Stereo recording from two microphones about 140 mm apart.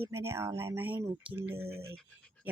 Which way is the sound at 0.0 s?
20° right (ahead or behind).